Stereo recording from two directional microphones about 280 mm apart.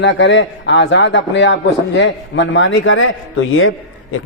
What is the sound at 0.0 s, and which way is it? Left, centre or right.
A man's voice, left.